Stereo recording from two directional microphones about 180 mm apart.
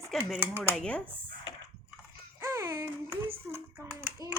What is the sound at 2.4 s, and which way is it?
Child singing, 15° right (ahead or behind).